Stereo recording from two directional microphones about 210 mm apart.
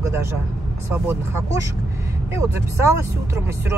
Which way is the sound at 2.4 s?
15° right (ahead or behind).